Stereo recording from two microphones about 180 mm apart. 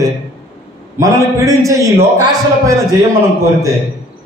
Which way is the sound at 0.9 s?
15° right (ahead or behind).